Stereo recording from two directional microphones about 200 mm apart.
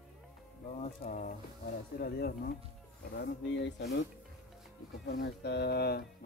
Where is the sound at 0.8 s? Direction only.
40° left (ahead or behind).